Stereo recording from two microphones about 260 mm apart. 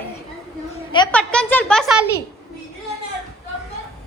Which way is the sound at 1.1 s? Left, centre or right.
Centre.